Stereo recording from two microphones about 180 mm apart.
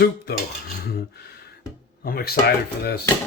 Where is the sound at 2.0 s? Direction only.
55° left (ahead or behind).